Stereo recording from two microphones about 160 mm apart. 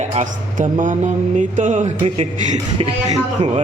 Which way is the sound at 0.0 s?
45° right (ahead or behind).